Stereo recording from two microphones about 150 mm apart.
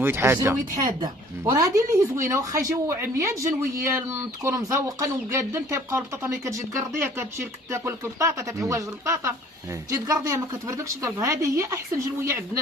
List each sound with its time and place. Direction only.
0.0 s speech: 15° right (ahead or behind)
0.9 s speech: 30° right (ahead or behind)